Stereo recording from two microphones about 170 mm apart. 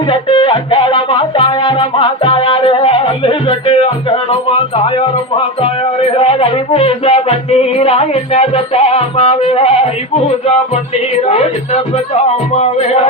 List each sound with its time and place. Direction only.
0.1 s music: 30° left (ahead or behind)
6.0 s music: 35° left (ahead or behind)
11.3 s music: 40° left (ahead or behind)